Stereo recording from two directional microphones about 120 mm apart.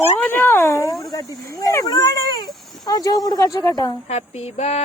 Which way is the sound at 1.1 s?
25° left (ahead or behind).